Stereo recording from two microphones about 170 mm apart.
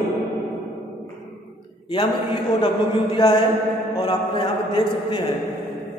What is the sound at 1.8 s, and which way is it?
A man's voice, 25° left (ahead or behind).